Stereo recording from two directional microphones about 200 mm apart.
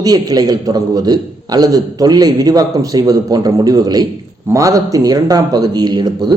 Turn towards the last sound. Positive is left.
turn(degrees=-20)  # may be behind; listen again after turning